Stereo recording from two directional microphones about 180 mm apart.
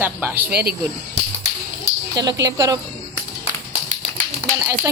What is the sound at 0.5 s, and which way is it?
Speech, 60° right (ahead or behind).